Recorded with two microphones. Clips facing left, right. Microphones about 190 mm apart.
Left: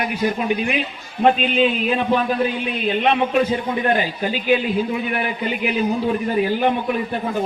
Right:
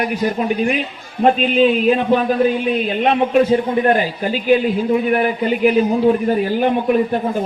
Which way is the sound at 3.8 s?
45° right (ahead or behind).